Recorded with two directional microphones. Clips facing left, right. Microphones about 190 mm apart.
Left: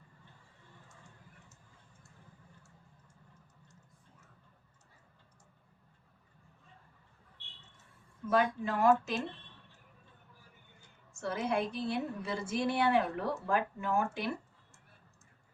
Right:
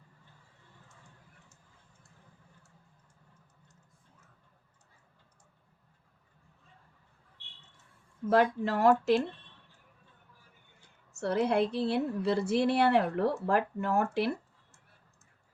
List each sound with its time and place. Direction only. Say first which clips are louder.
8.3 s a woman's voice: right 4 dB; 70° right (ahead or behind)
11.1 s a woman's voice: right 5 dB; 65° right (ahead or behind)